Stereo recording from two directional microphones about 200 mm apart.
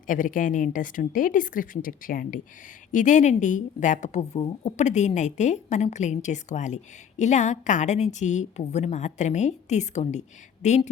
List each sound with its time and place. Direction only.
0.1 s a woman's voice: 40° left (ahead or behind)